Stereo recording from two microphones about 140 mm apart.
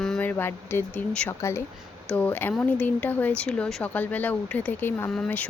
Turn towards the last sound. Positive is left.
turn(degrees=10)  # may be behind; listen again after turning